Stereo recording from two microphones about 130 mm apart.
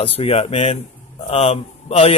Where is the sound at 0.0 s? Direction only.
50° left (ahead or behind).